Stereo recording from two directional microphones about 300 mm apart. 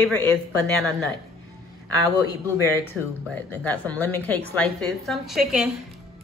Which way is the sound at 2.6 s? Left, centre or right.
Centre.